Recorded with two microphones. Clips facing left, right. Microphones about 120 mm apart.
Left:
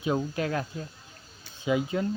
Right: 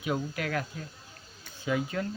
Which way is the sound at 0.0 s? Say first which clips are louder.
Left 4 dB; 25° left (ahead or behind).